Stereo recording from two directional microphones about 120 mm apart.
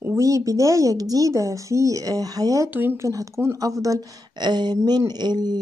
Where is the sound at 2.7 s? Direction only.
15° right (ahead or behind).